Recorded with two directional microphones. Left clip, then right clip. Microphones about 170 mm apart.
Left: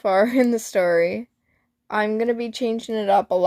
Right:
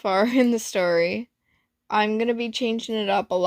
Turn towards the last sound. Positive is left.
turn(degrees=-15)  # may be behind; listen again after turning